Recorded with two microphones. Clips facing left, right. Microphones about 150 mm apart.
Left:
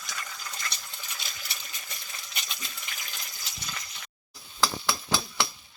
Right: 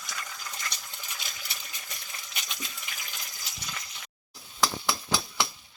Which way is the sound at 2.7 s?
5° right (ahead or behind).